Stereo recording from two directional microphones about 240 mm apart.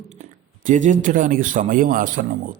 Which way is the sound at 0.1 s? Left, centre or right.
Right.